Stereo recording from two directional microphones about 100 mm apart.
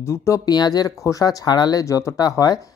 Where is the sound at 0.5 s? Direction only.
45° left (ahead or behind).